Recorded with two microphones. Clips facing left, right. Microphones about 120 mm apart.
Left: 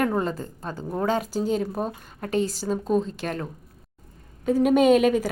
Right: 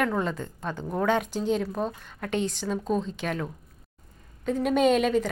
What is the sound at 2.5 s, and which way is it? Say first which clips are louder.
Speech: left 3 dB; 35° left (ahead or behind).